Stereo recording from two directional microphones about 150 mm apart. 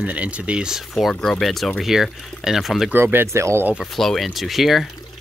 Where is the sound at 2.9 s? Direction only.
15° right (ahead or behind).